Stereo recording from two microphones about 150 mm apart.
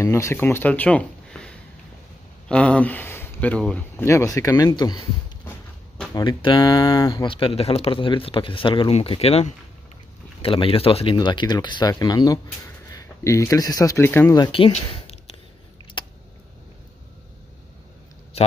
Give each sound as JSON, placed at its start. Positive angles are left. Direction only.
{"t": 0.0, "sound": "speech", "side_deg": 20}
{"t": 6.1, "sound": "speech", "side_deg": 30}
{"t": 7.2, "sound": "speech", "side_deg": 35}
{"t": 14.3, "sound": "speech", "side_deg": 30}
{"t": 16.0, "sound": "a sound", "side_deg": 30}